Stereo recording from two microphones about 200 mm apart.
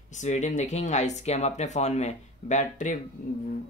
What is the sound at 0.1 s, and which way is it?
Speech, 35° left (ahead or behind).